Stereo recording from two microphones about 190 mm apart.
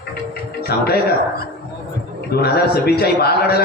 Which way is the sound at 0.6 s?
55° left (ahead or behind).